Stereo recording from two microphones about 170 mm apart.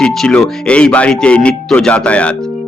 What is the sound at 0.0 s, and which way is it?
A man's voice, 5° left (ahead or behind).